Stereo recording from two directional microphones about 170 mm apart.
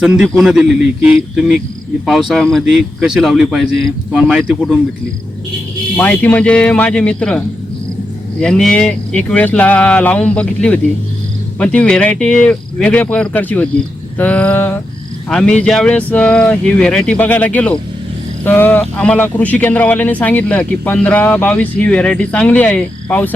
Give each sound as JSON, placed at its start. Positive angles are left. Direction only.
{"t": 0.0, "sound": "a man's voice", "side_deg": 0}
{"t": 6.0, "sound": "speech", "side_deg": 10}